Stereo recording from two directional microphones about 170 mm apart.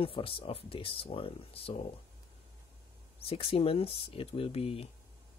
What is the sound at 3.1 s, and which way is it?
Speech, 35° left (ahead or behind).